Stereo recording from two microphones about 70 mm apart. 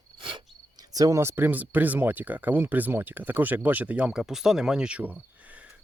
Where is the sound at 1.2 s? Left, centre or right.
Right; by 4.2 s centre.